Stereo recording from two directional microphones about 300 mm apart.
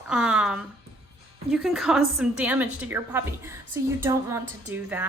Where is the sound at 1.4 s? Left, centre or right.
Centre.